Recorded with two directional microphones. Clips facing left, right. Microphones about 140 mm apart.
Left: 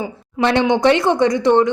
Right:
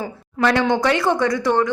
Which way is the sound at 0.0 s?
20° left (ahead or behind).